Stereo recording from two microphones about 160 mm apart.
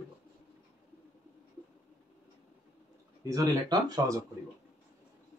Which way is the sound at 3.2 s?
20° right (ahead or behind).